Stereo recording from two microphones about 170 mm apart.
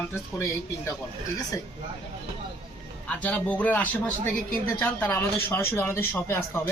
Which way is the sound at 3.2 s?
10° left (ahead or behind).